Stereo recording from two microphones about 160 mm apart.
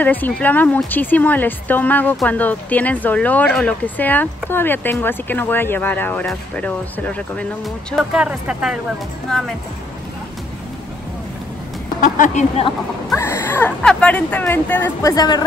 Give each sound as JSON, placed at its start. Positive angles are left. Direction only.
{"t": 0.0, "sound": "speech", "side_deg": 10}
{"t": 12.0, "sound": "speech", "side_deg": 55}
{"t": 13.1, "sound": "speech", "side_deg": 15}